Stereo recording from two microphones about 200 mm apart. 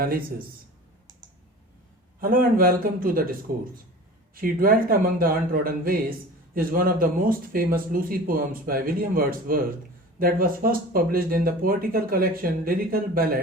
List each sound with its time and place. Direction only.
0.0 s speech: 45° right (ahead or behind)
2.2 s speech: 45° right (ahead or behind)